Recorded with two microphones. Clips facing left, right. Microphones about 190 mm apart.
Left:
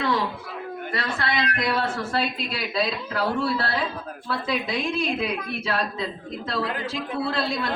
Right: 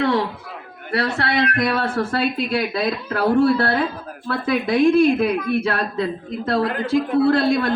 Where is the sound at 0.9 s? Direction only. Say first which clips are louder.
Right 7 dB; 70° right (ahead or behind).